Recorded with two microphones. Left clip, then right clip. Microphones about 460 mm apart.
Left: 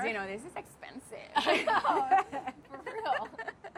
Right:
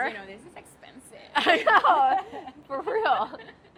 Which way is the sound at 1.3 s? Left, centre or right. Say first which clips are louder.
Right 8 dB; right.